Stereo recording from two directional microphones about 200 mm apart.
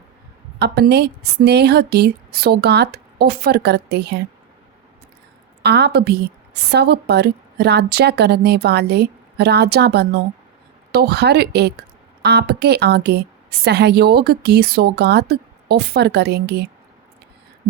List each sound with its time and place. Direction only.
0.6 s a woman's voice: 55° right (ahead or behind)
5.6 s a woman's voice: 55° right (ahead or behind)